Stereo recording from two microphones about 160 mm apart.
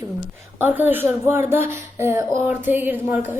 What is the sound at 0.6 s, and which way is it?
A woman's voice, 10° right (ahead or behind).